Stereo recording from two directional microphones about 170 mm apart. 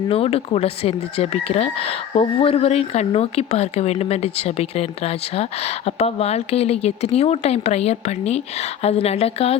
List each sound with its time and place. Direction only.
0.1 s speech: 35° left (ahead or behind)